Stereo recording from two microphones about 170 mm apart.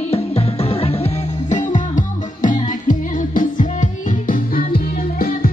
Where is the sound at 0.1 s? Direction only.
35° left (ahead or behind).